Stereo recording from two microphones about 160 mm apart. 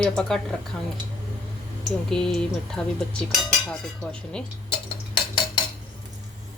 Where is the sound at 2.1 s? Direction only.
5° left (ahead or behind).